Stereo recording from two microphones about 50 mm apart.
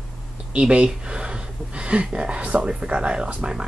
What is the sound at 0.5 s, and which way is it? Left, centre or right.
Speech, right.